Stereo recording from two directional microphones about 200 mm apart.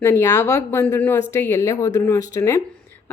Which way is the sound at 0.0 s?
15° left (ahead or behind).